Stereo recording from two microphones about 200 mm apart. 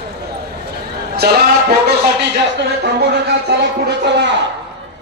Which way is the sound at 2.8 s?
55° right (ahead or behind).